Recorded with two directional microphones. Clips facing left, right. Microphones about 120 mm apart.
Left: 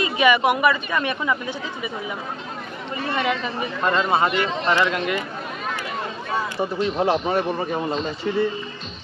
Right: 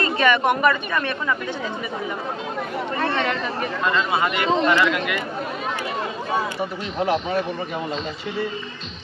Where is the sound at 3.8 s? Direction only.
35° left (ahead or behind).